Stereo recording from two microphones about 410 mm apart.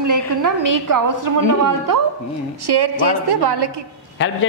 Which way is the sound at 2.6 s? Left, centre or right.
Right.